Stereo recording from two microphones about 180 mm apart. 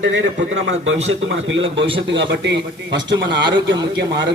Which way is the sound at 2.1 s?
75° right (ahead or behind).